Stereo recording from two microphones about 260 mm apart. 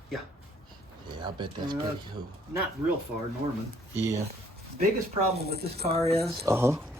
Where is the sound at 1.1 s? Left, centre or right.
Centre.